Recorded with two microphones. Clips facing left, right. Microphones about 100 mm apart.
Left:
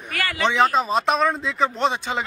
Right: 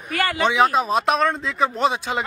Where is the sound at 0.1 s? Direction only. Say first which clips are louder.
Right 3 dB; 30° right (ahead or behind).